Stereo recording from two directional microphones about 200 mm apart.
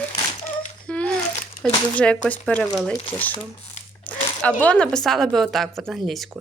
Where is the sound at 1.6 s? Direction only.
5° left (ahead or behind).